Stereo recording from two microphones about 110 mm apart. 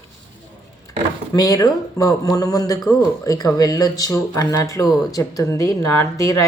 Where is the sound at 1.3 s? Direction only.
35° left (ahead or behind).